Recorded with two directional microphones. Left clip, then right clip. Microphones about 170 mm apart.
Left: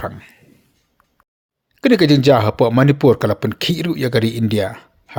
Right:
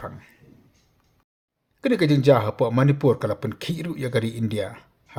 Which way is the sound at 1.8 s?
40° left (ahead or behind).